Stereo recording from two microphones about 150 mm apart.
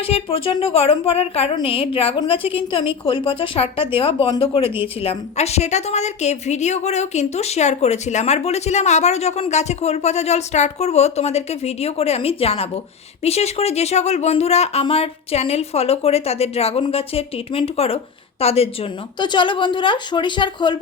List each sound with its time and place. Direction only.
0.0 s a woman's voice: 40° left (ahead or behind)